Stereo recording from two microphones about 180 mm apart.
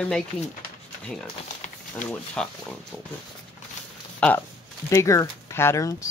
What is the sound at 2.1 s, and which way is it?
Speech, 5° left (ahead or behind).